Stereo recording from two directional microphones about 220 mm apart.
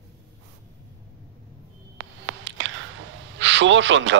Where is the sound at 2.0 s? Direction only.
60° right (ahead or behind).